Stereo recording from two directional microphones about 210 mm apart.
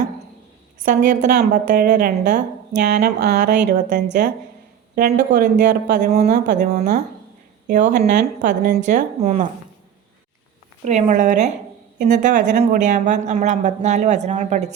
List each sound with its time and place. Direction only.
1.4 s a woman's voice: 40° right (ahead or behind)
2.8 s a woman's voice: 50° right (ahead or behind); by 9.5 s 35° right (ahead or behind)
10.8 s a woman's voice: 35° right (ahead or behind)